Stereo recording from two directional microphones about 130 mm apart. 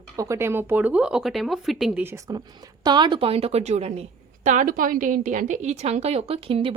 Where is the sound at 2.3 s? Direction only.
35° right (ahead or behind).